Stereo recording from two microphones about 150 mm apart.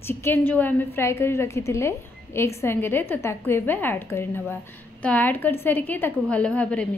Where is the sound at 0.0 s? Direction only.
15° left (ahead or behind).